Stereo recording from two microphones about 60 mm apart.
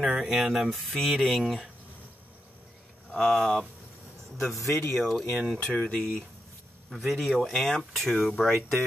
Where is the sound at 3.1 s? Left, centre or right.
Centre.